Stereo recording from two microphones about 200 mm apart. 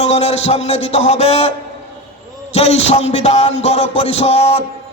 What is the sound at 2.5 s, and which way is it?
A man's voice, 30° left (ahead or behind).